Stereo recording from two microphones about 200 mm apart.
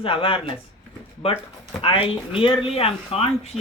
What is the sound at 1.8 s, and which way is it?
Speech, 30° left (ahead or behind).